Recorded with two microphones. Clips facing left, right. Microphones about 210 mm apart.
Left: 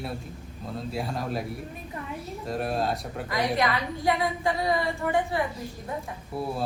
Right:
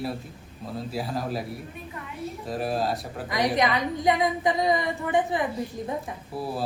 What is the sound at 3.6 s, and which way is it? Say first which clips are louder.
A woman's voice: right 2 dB; 20° right (ahead or behind).